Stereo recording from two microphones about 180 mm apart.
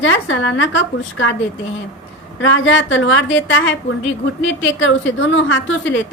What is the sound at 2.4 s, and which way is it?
A woman's voice, 90° left.